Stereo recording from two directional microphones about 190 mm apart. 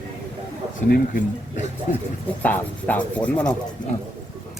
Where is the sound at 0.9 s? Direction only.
45° left (ahead or behind).